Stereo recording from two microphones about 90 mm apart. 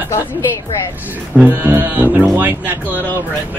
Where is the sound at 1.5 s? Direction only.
25° right (ahead or behind).